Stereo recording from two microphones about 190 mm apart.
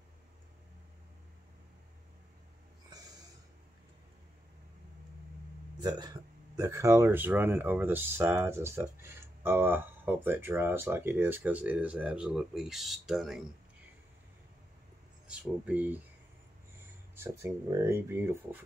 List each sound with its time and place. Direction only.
5.8 s a sound: 20° right (ahead or behind)
6.5 s speech: 15° right (ahead or behind)
15.2 s speech: 5° right (ahead or behind)
17.1 s speech: 15° right (ahead or behind)